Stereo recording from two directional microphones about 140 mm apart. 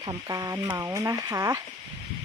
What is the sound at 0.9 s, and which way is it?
Speech, 20° right (ahead or behind).